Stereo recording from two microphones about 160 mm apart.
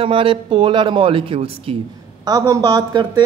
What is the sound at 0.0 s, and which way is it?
Speech, 35° right (ahead or behind).